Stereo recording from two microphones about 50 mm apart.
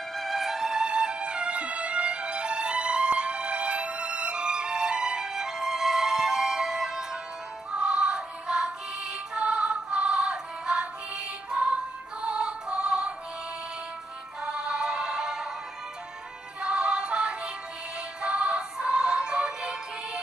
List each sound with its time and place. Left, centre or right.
0.1 s music: centre
14.4 s music: centre
16.6 s music: centre